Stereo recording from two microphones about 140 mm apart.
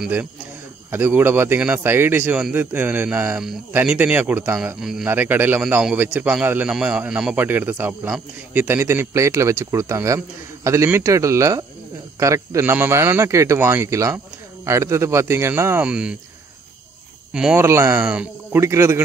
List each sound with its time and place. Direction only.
0.0 s a man's voice: 10° right (ahead or behind)
5.1 s a man's voice: 15° right (ahead or behind)
17.3 s speech: 5° right (ahead or behind)
17.6 s speech: 20° right (ahead or behind)
18.0 s speech: 10° right (ahead or behind)
18.6 s speech: 20° right (ahead or behind)